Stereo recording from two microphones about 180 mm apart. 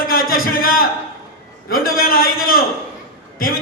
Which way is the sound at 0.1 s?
55° left (ahead or behind).